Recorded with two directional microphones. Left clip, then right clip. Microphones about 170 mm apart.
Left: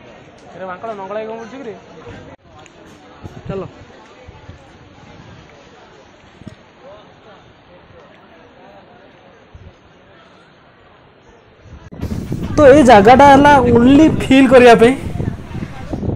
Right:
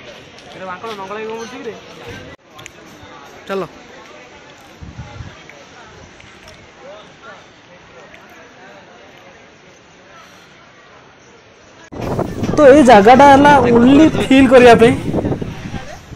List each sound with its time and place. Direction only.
0.6 s speech: 55° left (ahead or behind)
3.4 s speech: 10° right (ahead or behind)
12.1 s speech: centre (ahead or behind)